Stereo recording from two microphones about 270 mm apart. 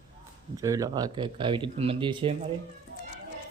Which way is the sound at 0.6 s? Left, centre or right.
Centre.